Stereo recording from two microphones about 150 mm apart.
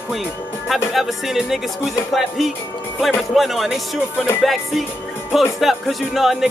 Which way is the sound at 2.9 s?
Centre (ahead or behind).